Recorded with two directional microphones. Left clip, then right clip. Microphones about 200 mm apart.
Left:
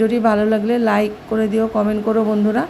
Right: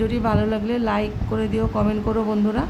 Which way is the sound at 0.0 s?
10° left (ahead or behind).